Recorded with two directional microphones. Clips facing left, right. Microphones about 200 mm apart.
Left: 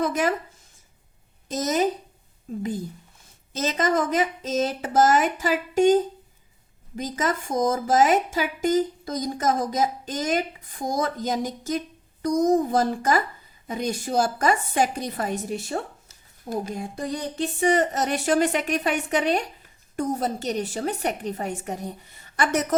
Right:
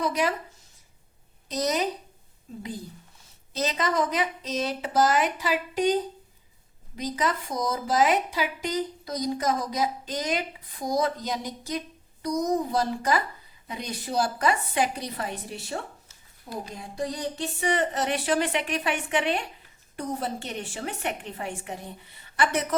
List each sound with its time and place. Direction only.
0.0 s a woman's voice: 50° left (ahead or behind)
1.5 s a woman's voice: 45° left (ahead or behind)
3.5 s a woman's voice: 45° left (ahead or behind)